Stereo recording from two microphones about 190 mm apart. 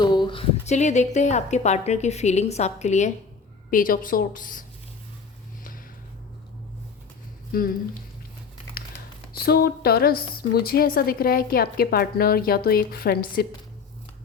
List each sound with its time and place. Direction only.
0.0 s a woman's voice: 25° left (ahead or behind); by 4.6 s 45° left (ahead or behind)
7.5 s a woman's voice: 50° left (ahead or behind)
9.4 s a woman's voice: 55° left (ahead or behind)